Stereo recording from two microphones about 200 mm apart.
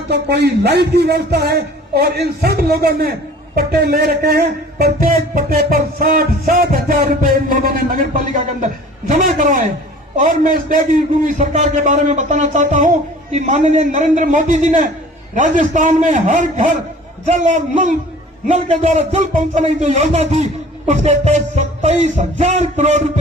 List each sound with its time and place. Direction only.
0.1 s a man's voice: 55° right (ahead or behind); by 23.0 s 35° right (ahead or behind)